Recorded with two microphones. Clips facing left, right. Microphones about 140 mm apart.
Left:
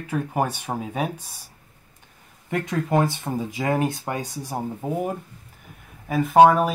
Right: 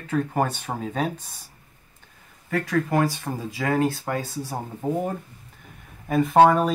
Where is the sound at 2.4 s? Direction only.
20° left (ahead or behind).